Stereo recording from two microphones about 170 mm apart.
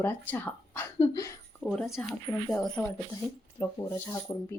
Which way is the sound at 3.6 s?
20° left (ahead or behind).